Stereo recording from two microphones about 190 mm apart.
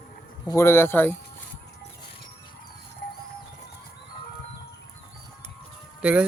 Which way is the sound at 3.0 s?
60° left (ahead or behind).